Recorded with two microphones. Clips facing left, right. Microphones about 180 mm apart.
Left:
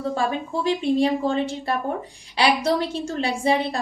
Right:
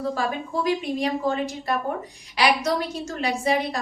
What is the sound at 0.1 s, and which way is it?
A woman's voice, 25° left (ahead or behind).